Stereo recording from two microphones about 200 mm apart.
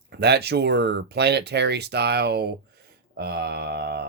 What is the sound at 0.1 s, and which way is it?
Speech, 55° right (ahead or behind).